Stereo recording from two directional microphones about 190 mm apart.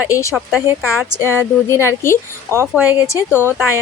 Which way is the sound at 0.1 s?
15° left (ahead or behind).